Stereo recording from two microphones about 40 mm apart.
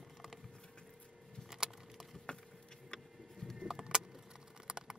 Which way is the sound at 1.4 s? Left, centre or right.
Centre.